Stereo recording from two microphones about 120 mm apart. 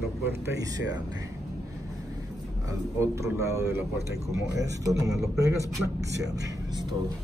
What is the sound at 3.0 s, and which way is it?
Speech, 25° right (ahead or behind).